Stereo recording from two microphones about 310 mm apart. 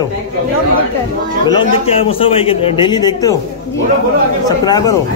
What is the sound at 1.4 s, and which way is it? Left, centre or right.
A man's voice, centre.